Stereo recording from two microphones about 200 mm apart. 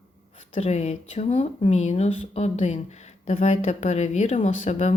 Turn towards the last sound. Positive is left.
turn(degrees=35)  # may be behind; listen again after turning